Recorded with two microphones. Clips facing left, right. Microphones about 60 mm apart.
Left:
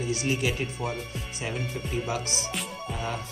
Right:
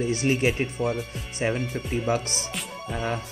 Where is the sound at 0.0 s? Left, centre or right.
Right.